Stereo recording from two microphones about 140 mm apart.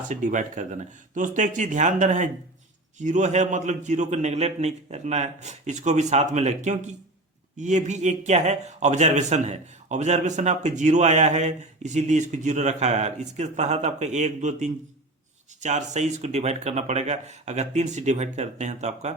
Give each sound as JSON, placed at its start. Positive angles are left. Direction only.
{"t": 0.1, "sound": "a man's voice", "side_deg": -60}